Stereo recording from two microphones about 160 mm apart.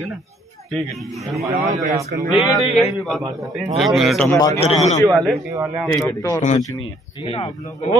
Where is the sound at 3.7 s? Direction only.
Centre (ahead or behind).